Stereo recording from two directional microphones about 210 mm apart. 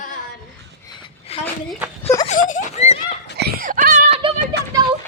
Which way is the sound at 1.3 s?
30° left (ahead or behind).